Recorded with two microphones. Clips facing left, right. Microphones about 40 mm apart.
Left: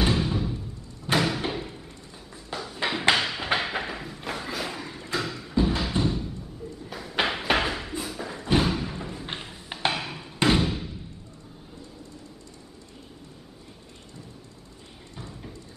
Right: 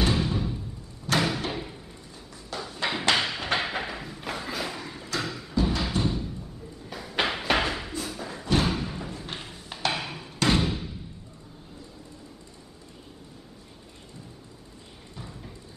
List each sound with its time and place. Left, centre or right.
0.0 s music: centre
1.1 s slam: left
1.5 s door: centre
2.6 s a sound: centre
5.5 s music: centre
5.8 s a sound: centre
8.0 s thump: centre
8.6 s music: centre
9.7 s a sound: left
9.9 s music: centre
10.6 s thump: centre